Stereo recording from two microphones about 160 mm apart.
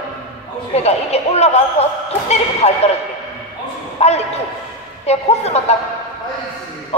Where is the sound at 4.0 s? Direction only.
40° left (ahead or behind).